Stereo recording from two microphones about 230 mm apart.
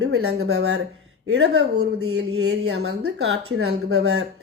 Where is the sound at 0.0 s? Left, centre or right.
Right.